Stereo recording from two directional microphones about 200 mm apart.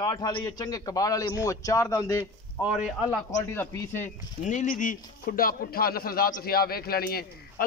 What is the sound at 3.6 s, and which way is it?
Speech, 15° left (ahead or behind).